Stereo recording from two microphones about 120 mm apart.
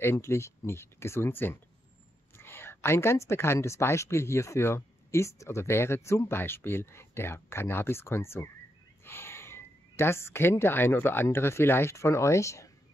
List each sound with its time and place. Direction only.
0.0 s speech: 20° left (ahead or behind)